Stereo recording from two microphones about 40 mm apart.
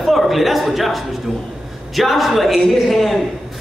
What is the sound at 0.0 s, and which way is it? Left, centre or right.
A man's voice, centre.